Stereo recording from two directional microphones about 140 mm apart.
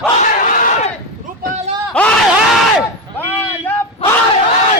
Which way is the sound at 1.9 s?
10° left (ahead or behind).